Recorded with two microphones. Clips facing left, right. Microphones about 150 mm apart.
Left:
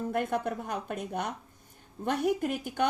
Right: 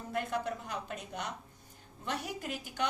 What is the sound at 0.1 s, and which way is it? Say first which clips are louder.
A woman's voice: left 1 dB; 55° left (ahead or behind).